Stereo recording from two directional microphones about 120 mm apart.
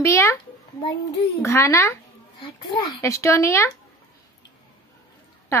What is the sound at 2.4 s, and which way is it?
Speech, 45° left (ahead or behind).